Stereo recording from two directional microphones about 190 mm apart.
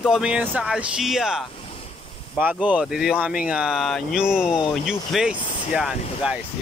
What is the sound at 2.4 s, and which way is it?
Speech, 5° right (ahead or behind).